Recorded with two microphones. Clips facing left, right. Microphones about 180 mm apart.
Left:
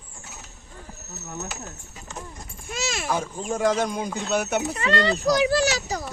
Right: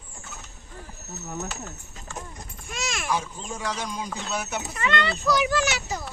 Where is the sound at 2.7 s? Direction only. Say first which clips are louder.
Left 3 dB; 25° left (ahead or behind).